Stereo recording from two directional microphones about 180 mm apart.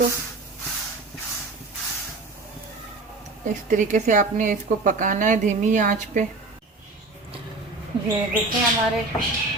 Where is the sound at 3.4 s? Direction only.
45° right (ahead or behind).